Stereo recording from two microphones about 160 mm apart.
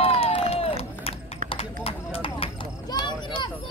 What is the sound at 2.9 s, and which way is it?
Children playing, 30° left (ahead or behind).